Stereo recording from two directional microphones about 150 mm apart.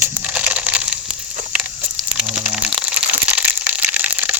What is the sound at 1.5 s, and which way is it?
Crumpling, 5° right (ahead or behind).